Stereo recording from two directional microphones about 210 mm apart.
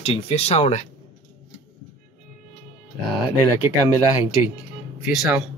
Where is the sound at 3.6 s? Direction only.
15° right (ahead or behind).